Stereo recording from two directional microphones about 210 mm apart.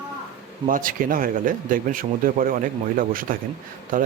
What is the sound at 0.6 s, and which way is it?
Speech, 40° right (ahead or behind).